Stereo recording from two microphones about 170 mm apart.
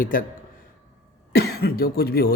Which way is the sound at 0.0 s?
55° left (ahead or behind).